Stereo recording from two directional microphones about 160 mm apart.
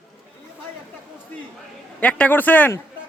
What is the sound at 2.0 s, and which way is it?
Speech, 10° left (ahead or behind).